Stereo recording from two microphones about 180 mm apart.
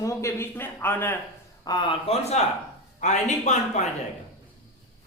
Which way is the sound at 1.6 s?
25° left (ahead or behind).